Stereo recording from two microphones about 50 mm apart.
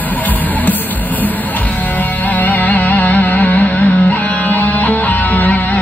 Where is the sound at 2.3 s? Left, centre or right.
Left.